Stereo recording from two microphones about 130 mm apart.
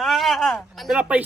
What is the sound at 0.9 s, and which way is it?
Speech, 10° right (ahead or behind).